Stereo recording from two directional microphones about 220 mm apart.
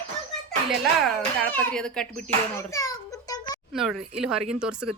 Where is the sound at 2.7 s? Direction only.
15° left (ahead or behind).